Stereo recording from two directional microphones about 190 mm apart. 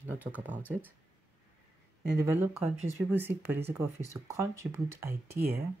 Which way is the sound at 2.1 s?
15° right (ahead or behind).